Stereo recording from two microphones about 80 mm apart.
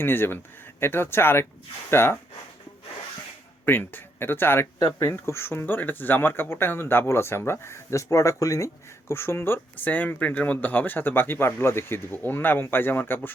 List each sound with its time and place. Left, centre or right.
0.0 s speech: left
3.7 s speech: left